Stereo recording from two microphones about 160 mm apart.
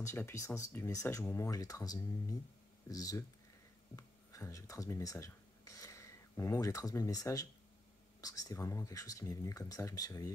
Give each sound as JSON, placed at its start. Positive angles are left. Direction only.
{"t": 0.3, "sound": "speech", "side_deg": 20}